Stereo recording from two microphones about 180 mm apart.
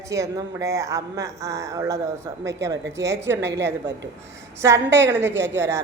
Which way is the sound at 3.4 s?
75° right (ahead or behind).